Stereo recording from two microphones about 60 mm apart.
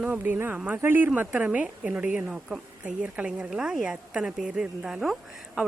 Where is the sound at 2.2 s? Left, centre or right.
Centre.